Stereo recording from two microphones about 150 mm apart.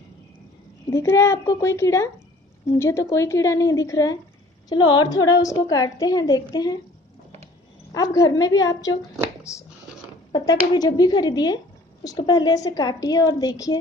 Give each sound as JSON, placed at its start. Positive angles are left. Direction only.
{"t": 0.8, "sound": "a woman's voice", "side_deg": 20}
{"t": 7.9, "sound": "a woman's voice", "side_deg": 25}
{"t": 9.4, "sound": "a sound", "side_deg": 20}
{"t": 10.3, "sound": "a woman's voice", "side_deg": 30}